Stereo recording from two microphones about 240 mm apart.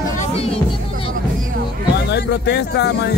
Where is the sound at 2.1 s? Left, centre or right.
Left.